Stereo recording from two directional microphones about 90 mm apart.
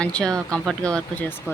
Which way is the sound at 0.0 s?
10° left (ahead or behind).